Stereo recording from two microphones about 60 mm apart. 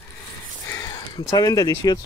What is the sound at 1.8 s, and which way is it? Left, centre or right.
Speech, left.